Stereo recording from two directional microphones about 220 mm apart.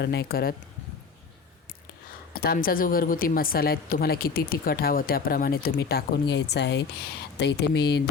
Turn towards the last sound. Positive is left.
turn(degrees=50)  # may be behind; listen again after turning